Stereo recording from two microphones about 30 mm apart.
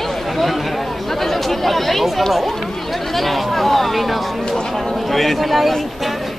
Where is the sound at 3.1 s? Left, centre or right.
Centre.